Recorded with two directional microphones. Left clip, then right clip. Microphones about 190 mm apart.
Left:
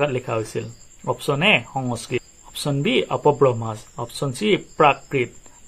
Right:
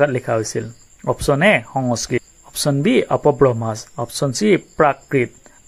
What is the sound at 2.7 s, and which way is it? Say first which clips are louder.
Speech: right 5 dB; 40° right (ahead or behind).